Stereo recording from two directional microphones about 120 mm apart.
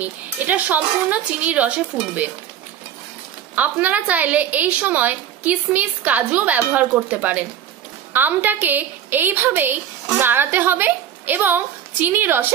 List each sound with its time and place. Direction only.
0.0 s a woman's voice: 15° right (ahead or behind)
3.5 s a woman's voice: 15° right (ahead or behind)